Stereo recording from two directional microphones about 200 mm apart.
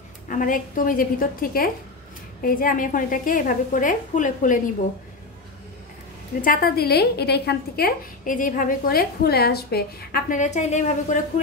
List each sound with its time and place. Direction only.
0.3 s a woman's voice: 40° left (ahead or behind)
6.4 s a woman's voice: 45° left (ahead or behind)